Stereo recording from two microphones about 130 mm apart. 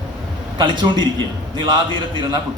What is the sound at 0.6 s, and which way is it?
A man's voice, 35° right (ahead or behind).